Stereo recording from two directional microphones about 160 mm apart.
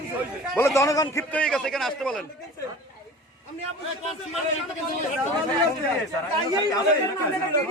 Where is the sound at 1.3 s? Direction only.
5° left (ahead or behind).